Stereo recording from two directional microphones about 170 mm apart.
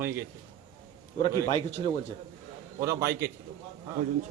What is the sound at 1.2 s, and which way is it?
Speech, 35° left (ahead or behind).